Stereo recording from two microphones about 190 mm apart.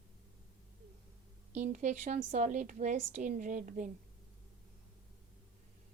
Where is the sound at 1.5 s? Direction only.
40° right (ahead or behind).